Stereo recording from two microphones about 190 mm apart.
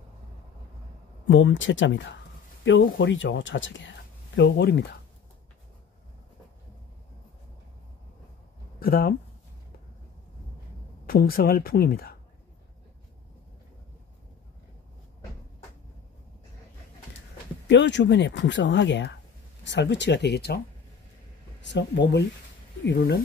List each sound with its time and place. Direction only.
1.2 s speech: 80° left
4.4 s speech: 60° left (ahead or behind)
8.7 s speech: 50° left (ahead or behind)
11.1 s speech: 50° left (ahead or behind)
17.6 s speech: 70° left (ahead or behind)
21.5 s speech: 70° left (ahead or behind)